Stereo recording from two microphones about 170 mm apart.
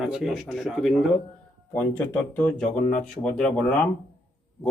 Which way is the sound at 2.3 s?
10° left (ahead or behind).